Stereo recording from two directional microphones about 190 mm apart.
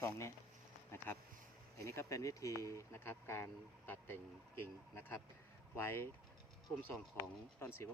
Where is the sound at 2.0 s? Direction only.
15° left (ahead or behind).